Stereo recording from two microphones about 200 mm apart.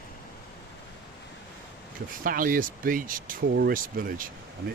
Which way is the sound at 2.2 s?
45° right (ahead or behind).